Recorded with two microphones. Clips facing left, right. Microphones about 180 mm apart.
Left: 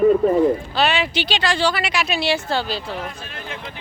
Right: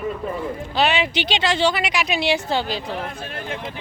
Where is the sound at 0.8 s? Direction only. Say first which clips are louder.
Even; 15° right (ahead or behind).